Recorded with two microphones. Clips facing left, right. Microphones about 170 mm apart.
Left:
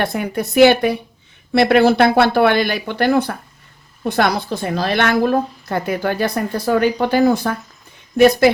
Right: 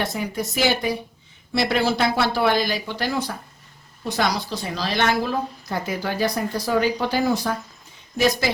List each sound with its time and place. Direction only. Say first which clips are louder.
0.0 s a woman's voice: left 5 dB; 60° left (ahead or behind)